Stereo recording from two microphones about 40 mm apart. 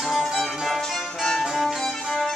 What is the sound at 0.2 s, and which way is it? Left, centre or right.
Music, centre.